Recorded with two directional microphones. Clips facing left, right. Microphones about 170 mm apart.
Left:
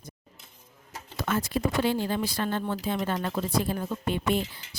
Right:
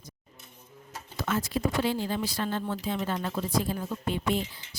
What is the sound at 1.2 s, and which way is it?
A woman's voice, 55° left (ahead or behind).